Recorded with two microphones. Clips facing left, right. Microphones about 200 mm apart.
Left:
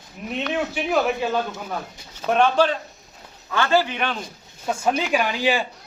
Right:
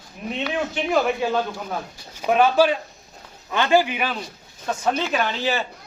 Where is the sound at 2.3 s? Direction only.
5° right (ahead or behind).